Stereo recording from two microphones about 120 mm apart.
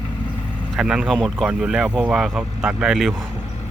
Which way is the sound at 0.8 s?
5° right (ahead or behind).